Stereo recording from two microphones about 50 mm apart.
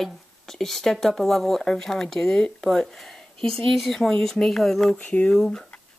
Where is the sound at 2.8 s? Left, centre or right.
Centre.